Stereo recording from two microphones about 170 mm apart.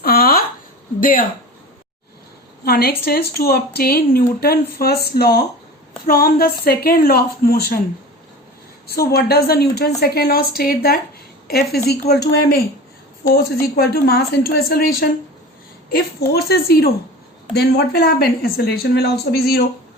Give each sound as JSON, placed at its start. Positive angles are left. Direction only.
{"t": 0.0, "sound": "a sound", "side_deg": 65}
{"t": 0.9, "sound": "speech", "side_deg": 55}
{"t": 2.6, "sound": "a woman's voice", "side_deg": 70}
{"t": 8.9, "sound": "a woman's voice", "side_deg": 65}